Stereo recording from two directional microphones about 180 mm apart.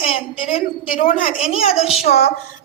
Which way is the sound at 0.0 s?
35° left (ahead or behind).